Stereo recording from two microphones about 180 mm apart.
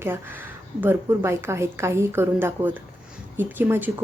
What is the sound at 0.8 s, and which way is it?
A woman's voice, 15° right (ahead or behind).